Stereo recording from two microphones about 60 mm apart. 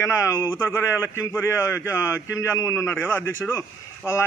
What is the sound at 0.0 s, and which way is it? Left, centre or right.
A man's voice, left.